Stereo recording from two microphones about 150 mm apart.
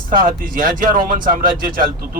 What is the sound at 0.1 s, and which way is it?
Speech, 70° right (ahead or behind).